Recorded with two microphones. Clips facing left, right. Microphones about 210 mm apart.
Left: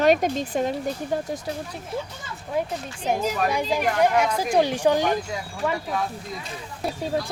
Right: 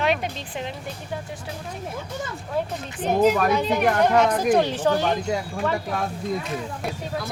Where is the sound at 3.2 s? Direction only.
55° right (ahead or behind).